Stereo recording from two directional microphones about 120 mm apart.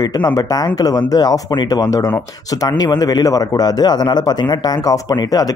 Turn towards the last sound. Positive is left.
turn(degrees=35)  # may be behind; listen again after turning